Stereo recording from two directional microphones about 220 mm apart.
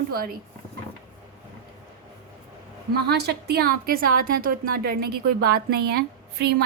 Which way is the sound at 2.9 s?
45° right (ahead or behind).